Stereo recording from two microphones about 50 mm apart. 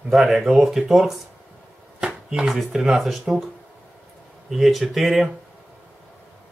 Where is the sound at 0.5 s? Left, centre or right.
Centre.